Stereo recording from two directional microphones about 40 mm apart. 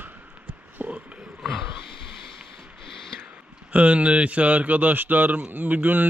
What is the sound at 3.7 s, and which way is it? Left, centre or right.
Speech, right.